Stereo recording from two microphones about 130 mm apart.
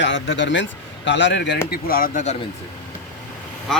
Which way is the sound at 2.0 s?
75° left (ahead or behind).